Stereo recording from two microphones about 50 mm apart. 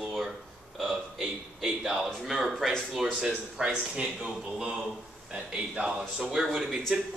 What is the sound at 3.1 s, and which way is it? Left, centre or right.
A man's voice, centre.